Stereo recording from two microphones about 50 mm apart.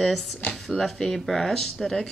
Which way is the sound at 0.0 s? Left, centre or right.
Centre.